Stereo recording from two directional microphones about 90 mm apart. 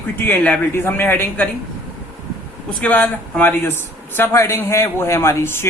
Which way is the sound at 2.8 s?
15° left (ahead or behind).